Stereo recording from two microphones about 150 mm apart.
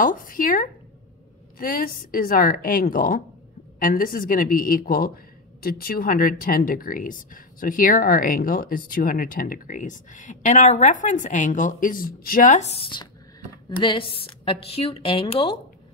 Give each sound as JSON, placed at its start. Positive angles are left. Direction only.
{"t": 0.0, "sound": "speech", "side_deg": 65}
{"t": 13.7, "sound": "a woman's voice", "side_deg": 35}